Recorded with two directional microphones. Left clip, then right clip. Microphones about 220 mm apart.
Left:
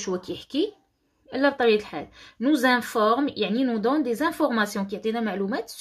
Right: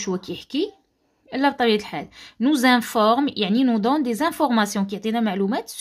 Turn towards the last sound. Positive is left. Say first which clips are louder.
# right 4 dB
turn(degrees=-35)  # may be behind; listen again after turning